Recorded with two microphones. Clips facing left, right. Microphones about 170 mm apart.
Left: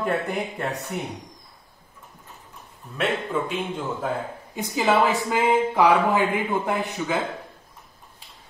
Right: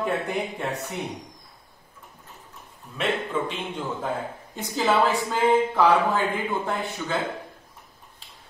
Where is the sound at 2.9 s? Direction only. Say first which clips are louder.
Left 1 dB; 5° left (ahead or behind).